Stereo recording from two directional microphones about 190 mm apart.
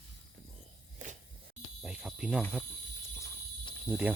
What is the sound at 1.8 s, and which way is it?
Cricket, 5° right (ahead or behind).